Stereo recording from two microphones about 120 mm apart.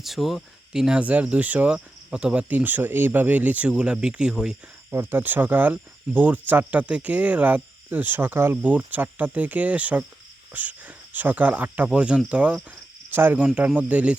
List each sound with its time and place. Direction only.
0.0 s speech: centre (ahead or behind)